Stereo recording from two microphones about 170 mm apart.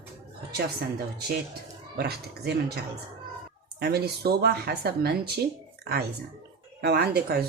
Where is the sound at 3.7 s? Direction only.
70° right (ahead or behind).